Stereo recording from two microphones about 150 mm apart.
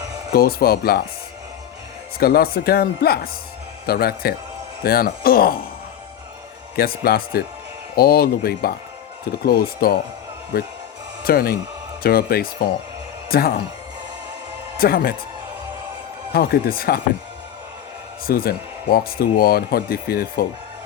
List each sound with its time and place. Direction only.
0.3 s speech: 90° left
2.1 s speech: 90° left
6.7 s speech: 85° left
14.8 s speech: 85° left
16.3 s speech: 85° left
18.3 s speech: 80° left